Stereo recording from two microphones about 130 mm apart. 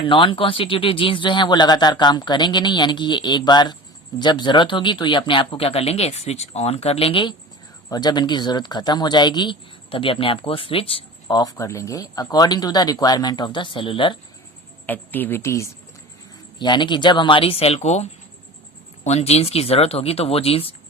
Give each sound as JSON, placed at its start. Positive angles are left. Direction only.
{"t": 0.0, "sound": "speech", "side_deg": 40}
{"t": 14.8, "sound": "speech", "side_deg": 15}
{"t": 16.6, "sound": "speech", "side_deg": 35}